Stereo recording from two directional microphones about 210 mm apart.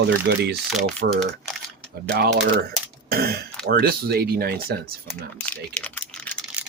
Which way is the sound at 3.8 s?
45° right (ahead or behind).